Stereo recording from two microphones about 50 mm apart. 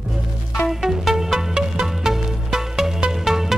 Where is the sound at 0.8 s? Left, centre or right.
Centre.